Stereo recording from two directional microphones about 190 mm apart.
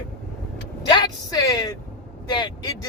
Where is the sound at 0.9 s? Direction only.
20° left (ahead or behind).